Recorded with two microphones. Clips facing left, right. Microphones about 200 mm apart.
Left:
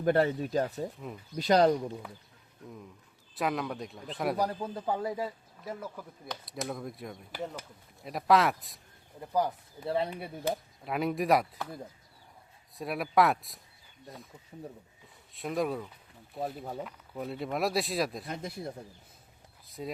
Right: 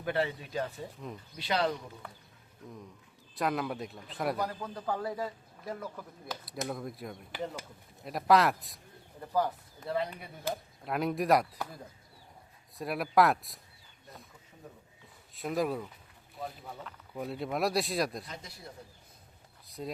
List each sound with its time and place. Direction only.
0.0 s speech: 45° left (ahead or behind)
3.3 s a man's voice: centre (ahead or behind)
4.4 s a man's voice: 30° left (ahead or behind); by 8.8 s centre (ahead or behind)
9.2 s speech: 15° left (ahead or behind)
9.8 s speech: 30° left (ahead or behind)
10.8 s a man's voice: centre (ahead or behind)
12.7 s a man's voice: centre (ahead or behind)
15.4 s a man's voice: centre (ahead or behind)
17.2 s a man's voice: centre (ahead or behind)
18.3 s speech: 55° left (ahead or behind)
19.6 s a sound: centre (ahead or behind)